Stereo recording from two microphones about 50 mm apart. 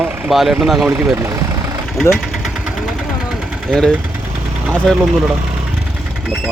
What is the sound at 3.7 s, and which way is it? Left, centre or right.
Speech, centre.